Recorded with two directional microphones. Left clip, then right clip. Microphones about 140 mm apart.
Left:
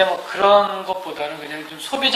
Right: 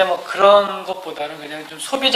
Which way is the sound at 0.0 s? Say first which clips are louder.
Right 3 dB; 40° right (ahead or behind).